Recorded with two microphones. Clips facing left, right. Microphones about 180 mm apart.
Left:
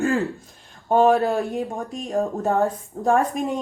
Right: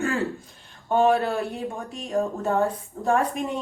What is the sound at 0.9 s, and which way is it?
A woman's voice, 40° left (ahead or behind).